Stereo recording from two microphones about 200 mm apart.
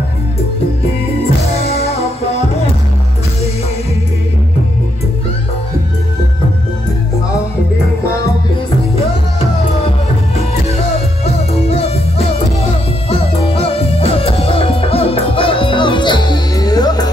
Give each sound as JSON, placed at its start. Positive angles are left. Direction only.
{"t": 1.9, "sound": "music", "side_deg": 30}
{"t": 8.9, "sound": "music", "side_deg": 30}
{"t": 11.7, "sound": "music", "side_deg": 30}